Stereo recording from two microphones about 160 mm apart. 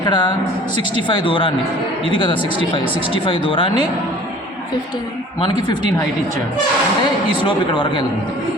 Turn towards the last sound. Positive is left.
turn(degrees=30)  # may be behind; listen again after turning